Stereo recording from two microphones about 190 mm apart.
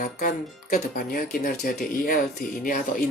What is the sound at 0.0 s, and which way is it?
Speech, 45° left (ahead or behind).